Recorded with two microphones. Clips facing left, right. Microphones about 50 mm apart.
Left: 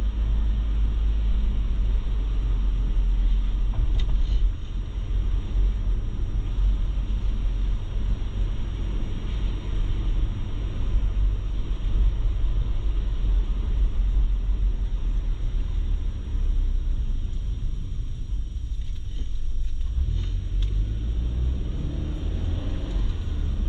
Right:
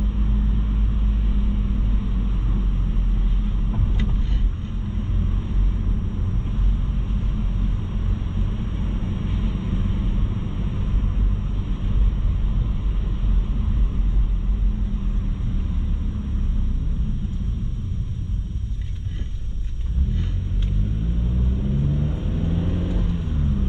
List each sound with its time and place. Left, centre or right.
0.2 s vehicle: right
8.1 s vehicle: right
21.6 s vehicle: right